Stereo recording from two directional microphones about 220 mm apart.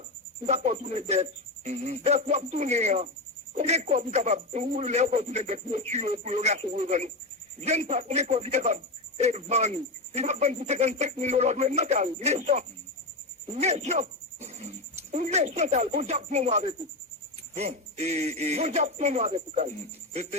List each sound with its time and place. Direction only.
0.4 s a man's voice: 30° right (ahead or behind)